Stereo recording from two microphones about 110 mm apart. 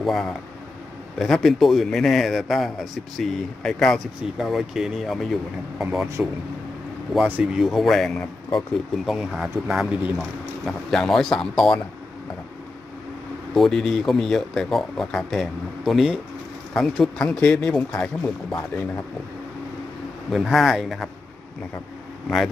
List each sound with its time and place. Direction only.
0.0 s speech: centre (ahead or behind)
6.2 s speech: 10° right (ahead or behind)
7.6 s speech: centre (ahead or behind)
13.5 s speech: centre (ahead or behind)
17.9 s speech: 15° left (ahead or behind)
20.3 s speech: centre (ahead or behind)